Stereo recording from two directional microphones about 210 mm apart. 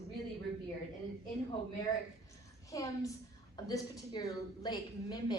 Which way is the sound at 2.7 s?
15° left (ahead or behind).